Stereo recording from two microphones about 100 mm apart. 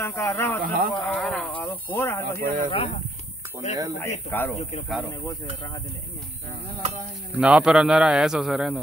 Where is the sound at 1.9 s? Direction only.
25° left (ahead or behind).